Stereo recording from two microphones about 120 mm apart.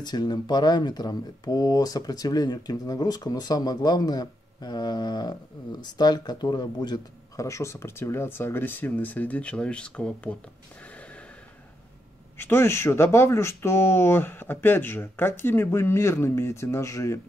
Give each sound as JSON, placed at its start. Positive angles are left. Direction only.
{"t": 0.0, "sound": "speech", "side_deg": 35}
{"t": 12.4, "sound": "speech", "side_deg": 20}